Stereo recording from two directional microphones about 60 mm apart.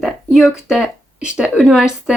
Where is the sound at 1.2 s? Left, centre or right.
Centre.